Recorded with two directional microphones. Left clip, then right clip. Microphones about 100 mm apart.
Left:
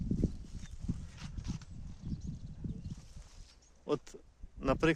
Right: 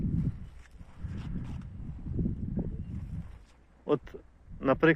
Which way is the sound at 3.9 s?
20° left (ahead or behind).